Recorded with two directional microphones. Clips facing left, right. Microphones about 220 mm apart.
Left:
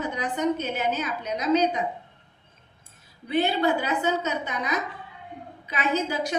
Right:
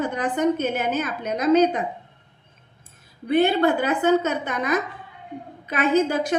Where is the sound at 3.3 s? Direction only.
55° right (ahead or behind).